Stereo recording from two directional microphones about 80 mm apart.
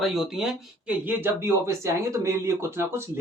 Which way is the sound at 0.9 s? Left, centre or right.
Right.